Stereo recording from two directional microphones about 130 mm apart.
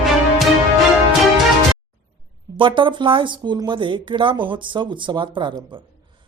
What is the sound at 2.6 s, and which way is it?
Speech, 40° right (ahead or behind).